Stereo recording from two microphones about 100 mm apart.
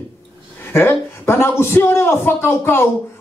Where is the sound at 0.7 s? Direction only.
25° left (ahead or behind).